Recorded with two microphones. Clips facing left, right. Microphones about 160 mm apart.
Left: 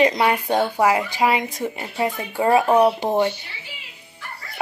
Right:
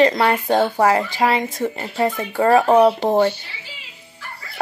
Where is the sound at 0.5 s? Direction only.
25° right (ahead or behind).